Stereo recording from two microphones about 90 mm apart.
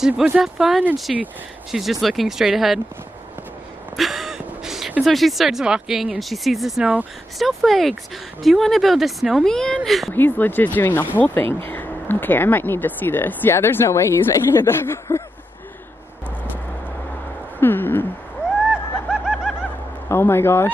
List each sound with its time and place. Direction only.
0.0 s speech: 10° right (ahead or behind)
3.9 s gasp: centre (ahead or behind)
5.0 s speech: centre (ahead or behind)
10.1 s speech: 20° left (ahead or behind)
17.6 s a sound: 25° left (ahead or behind)
18.7 s snicker: 10° right (ahead or behind)
20.1 s speech: 25° left (ahead or behind)